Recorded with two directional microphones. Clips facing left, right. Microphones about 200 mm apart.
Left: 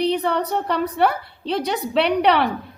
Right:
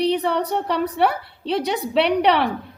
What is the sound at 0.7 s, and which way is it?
A woman's voice, centre (ahead or behind).